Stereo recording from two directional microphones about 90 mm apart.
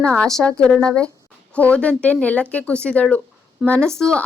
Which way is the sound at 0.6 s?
10° left (ahead or behind).